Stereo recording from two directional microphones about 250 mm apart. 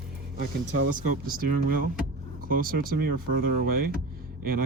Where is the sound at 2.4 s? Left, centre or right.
Right.